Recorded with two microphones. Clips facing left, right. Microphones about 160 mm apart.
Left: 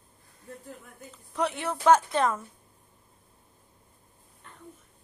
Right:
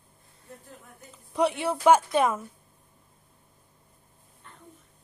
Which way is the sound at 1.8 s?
10° right (ahead or behind).